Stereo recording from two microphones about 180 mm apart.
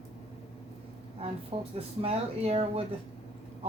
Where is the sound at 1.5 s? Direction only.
30° right (ahead or behind).